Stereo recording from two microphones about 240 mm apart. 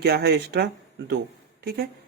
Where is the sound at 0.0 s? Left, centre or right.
Right.